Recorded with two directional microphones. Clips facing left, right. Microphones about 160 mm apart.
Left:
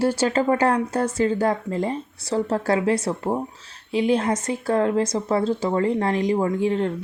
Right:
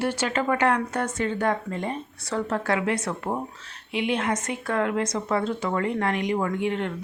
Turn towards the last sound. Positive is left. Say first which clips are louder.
# left 5 dB
turn(degrees=35)  # may be behind; listen again after turning